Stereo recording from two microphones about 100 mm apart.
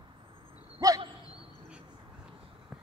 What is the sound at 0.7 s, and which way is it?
Dog, 35° right (ahead or behind).